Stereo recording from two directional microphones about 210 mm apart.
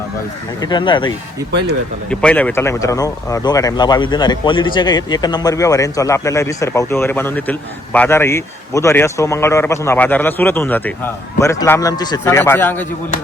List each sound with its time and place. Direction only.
0.6 s speech: 20° left (ahead or behind)
2.0 s speech: 5° left (ahead or behind)